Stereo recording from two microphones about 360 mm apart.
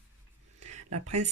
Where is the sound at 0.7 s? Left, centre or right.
Centre.